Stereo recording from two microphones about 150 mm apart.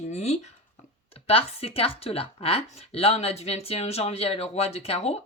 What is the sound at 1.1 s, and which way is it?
Speech, 40° left (ahead or behind).